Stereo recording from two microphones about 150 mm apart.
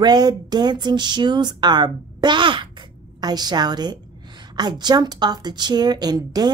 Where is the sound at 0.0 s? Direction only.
25° right (ahead or behind).